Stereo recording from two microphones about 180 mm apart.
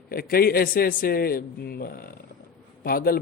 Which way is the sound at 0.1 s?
55° left (ahead or behind).